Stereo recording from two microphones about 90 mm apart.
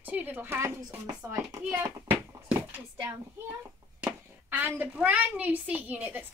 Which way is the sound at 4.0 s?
20° right (ahead or behind).